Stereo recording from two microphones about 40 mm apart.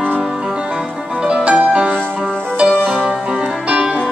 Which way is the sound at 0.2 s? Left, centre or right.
Centre.